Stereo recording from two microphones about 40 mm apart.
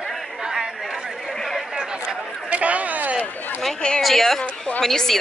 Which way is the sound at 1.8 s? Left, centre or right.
Right.